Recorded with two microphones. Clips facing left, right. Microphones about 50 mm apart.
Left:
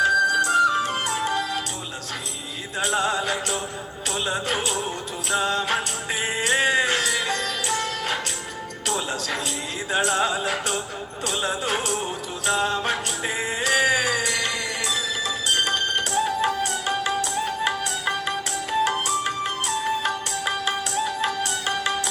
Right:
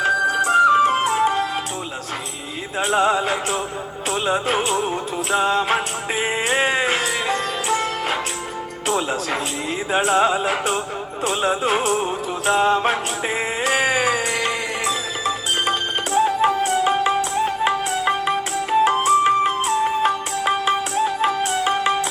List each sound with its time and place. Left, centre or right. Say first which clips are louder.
0.2 s music: right 3 dB; right
2.7 s music: right 5 dB; right
9.9 s music: right 5 dB; right